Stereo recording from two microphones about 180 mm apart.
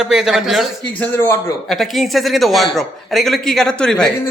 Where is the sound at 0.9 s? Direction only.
10° left (ahead or behind).